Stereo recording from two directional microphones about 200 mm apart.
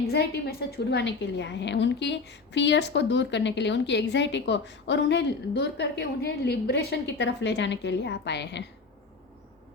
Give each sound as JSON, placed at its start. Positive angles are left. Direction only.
{"t": 0.1, "sound": "a woman's voice", "side_deg": 50}